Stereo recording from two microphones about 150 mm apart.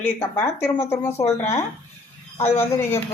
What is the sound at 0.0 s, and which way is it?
A woman's voice, 15° left (ahead or behind).